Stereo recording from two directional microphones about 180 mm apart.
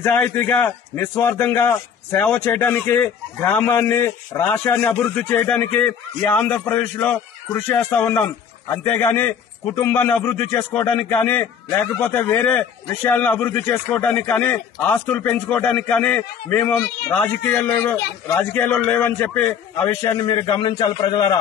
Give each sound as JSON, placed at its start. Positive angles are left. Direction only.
{"t": 0.0, "sound": "a man's voice", "side_deg": 10}